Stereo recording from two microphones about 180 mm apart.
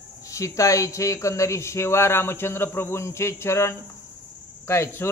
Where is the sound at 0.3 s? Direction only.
15° left (ahead or behind).